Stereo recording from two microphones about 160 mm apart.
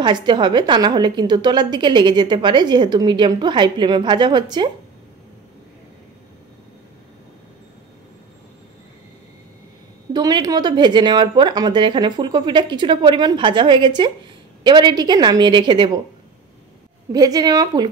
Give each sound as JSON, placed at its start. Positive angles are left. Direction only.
{"t": 0.0, "sound": "a woman's voice", "side_deg": -30}
{"t": 10.1, "sound": "a woman's voice", "side_deg": -25}
{"t": 17.1, "sound": "a woman's voice", "side_deg": -25}